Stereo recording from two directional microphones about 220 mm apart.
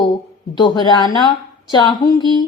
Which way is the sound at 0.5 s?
20° left (ahead or behind).